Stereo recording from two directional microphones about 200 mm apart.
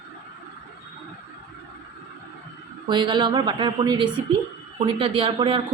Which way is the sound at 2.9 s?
20° right (ahead or behind).